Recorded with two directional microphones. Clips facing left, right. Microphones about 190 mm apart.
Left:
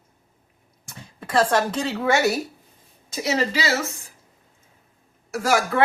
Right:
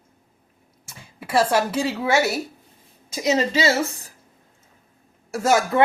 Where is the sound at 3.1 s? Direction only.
15° right (ahead or behind).